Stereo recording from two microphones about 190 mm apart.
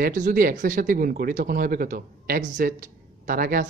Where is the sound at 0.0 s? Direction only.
45° right (ahead or behind).